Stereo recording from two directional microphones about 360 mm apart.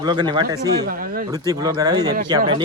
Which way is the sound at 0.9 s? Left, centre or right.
Right.